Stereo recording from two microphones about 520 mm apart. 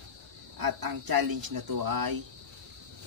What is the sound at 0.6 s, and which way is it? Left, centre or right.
Speech, right.